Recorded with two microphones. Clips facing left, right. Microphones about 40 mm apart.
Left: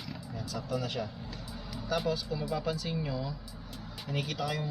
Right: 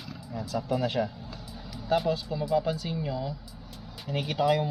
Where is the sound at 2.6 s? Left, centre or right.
Centre.